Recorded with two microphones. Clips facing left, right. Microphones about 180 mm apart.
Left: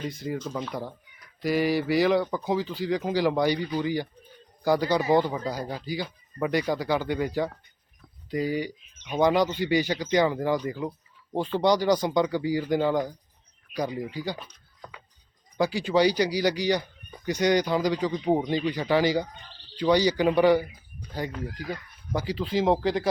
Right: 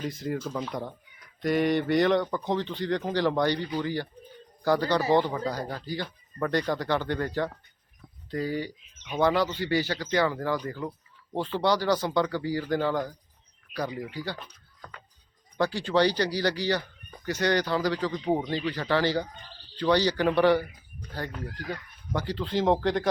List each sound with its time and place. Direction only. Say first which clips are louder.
0.0 s speech: even; centre (ahead or behind)
15.5 s speech: left 1 dB; 10° left (ahead or behind)